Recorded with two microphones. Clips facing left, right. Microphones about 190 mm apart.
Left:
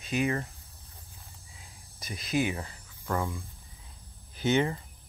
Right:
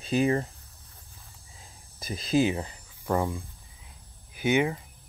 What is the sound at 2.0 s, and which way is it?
Speech, 30° right (ahead or behind).